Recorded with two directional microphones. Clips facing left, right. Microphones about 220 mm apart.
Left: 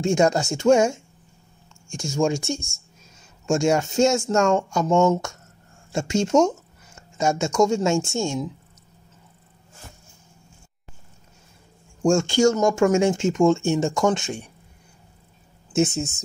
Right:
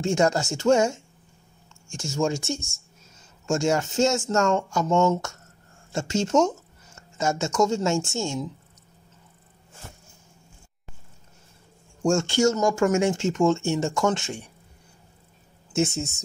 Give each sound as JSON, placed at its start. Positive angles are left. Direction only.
{"t": 0.0, "sound": "speech", "side_deg": 15}
{"t": 12.0, "sound": "speech", "side_deg": 15}
{"t": 15.7, "sound": "speech", "side_deg": 15}